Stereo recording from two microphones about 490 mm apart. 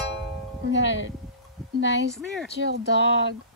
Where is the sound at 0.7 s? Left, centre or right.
Left.